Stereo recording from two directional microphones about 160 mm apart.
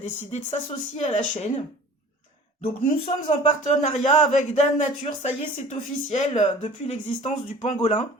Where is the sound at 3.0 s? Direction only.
40° left (ahead or behind).